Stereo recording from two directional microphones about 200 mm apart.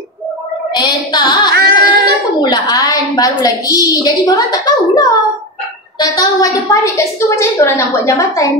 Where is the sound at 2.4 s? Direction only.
20° left (ahead or behind).